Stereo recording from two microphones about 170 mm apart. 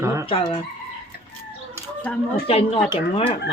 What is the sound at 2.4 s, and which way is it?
Speech, 35° left (ahead or behind).